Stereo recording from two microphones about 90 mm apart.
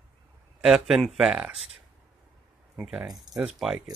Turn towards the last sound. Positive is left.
turn(degrees=-5)  # may be behind; listen again after turning